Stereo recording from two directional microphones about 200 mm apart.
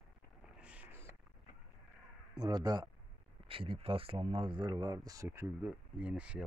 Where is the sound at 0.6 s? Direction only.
5° right (ahead or behind).